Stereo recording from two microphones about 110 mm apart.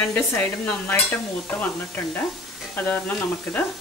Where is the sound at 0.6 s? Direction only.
10° left (ahead or behind).